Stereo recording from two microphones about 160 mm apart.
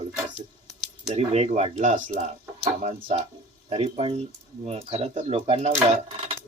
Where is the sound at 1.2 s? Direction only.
40° right (ahead or behind).